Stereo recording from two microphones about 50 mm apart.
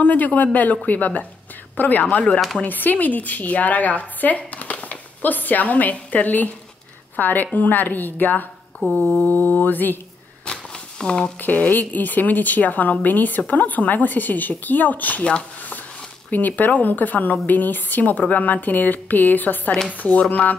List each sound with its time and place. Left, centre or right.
0.0 s a woman's voice: left
8.7 s mantra: left
9.0 s a woman's voice: left
10.4 s a sound: centre
11.4 s a woman's voice: left